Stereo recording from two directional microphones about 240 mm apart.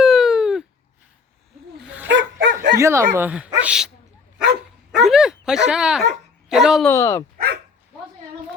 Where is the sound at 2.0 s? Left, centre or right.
Right.